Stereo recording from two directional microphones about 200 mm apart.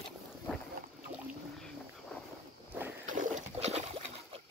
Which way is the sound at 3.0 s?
40° right (ahead or behind).